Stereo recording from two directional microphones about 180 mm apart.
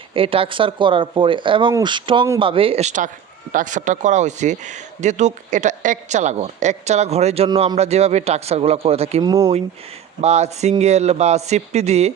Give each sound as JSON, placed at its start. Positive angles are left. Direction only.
{"t": 0.1, "sound": "speech", "side_deg": -30}
{"t": 9.2, "sound": "speech", "side_deg": -20}
{"t": 10.2, "sound": "speech", "side_deg": -35}